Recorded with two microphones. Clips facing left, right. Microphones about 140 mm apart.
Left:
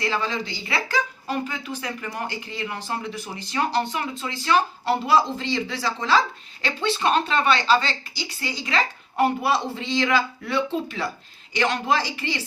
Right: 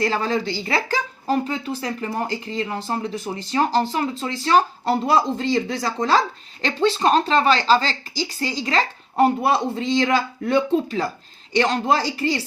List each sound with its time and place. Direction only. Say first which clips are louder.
0.0 s speech: right 5 dB; 40° right (ahead or behind)